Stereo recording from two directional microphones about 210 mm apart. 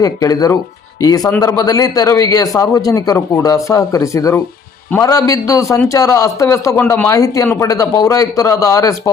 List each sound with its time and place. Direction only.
0.0 s a man's voice: 15° left (ahead or behind)